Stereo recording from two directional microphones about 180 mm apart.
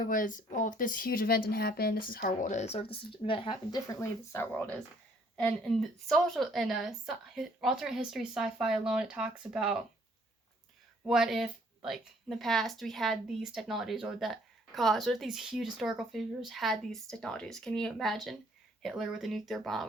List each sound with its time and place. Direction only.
0.0 s a woman's voice: 50° left (ahead or behind); by 9.8 s 5° right (ahead or behind)
11.0 s a woman's voice: 5° right (ahead or behind)